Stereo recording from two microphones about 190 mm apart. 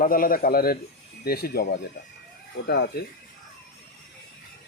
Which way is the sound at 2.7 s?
55° left (ahead or behind).